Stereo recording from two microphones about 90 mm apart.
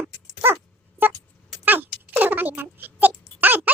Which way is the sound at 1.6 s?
20° right (ahead or behind).